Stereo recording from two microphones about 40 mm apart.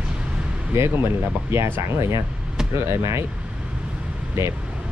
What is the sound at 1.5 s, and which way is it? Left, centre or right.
Speech, right.